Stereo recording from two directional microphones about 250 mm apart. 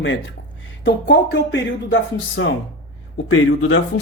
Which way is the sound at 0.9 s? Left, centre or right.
Left.